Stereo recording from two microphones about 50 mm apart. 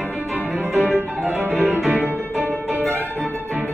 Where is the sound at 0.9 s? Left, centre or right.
Right.